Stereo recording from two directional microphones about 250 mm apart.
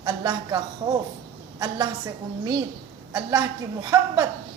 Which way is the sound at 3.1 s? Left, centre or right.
Centre.